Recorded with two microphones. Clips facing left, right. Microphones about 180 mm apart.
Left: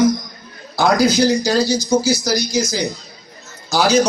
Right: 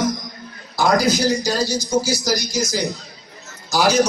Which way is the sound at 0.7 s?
65° left (ahead or behind).